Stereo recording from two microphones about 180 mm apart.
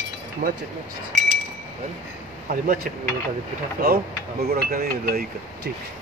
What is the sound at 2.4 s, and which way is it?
Speech, 50° right (ahead or behind).